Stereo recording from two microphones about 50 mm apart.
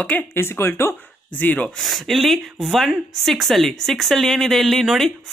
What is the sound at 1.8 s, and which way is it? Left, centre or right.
Speech, centre.